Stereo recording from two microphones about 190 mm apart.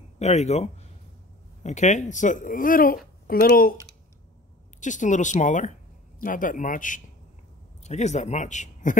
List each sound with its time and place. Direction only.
0.2 s a man's voice: 35° left (ahead or behind)
4.7 s a man's voice: 40° left (ahead or behind)